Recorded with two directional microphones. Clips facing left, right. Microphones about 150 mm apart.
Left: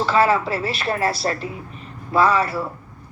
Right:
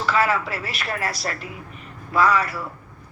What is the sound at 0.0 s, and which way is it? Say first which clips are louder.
A woman's voice: left 4 dB; 30° left (ahead or behind).